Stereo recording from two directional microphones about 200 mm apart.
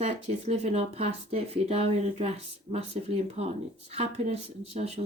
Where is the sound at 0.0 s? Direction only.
35° right (ahead or behind).